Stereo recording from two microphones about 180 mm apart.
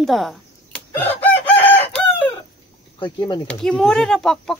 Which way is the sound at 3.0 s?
25° left (ahead or behind).